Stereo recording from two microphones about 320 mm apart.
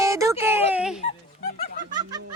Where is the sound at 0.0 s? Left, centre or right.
Centre.